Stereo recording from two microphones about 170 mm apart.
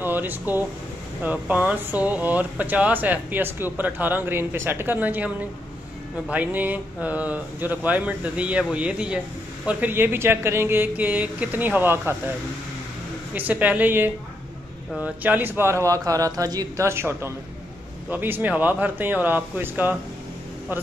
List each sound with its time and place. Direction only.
0.0 s speech: 10° right (ahead or behind)
13.3 s speech: 10° right (ahead or behind)